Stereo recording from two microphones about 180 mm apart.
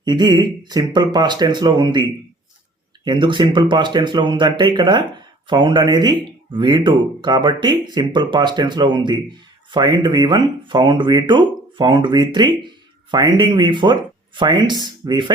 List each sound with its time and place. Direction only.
0.0 s speech: 25° right (ahead or behind)